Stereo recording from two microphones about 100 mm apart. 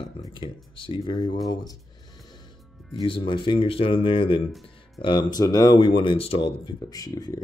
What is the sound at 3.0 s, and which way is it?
Speech, 55° left (ahead or behind).